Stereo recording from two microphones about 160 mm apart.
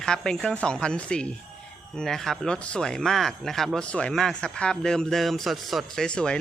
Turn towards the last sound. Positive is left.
turn(degrees=5)  # may be behind; listen again after turning